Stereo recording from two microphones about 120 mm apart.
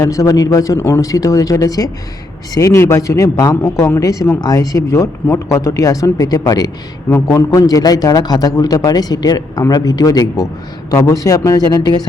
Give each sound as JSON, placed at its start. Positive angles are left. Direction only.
{"t": 0.0, "sound": "a man's voice", "side_deg": 30}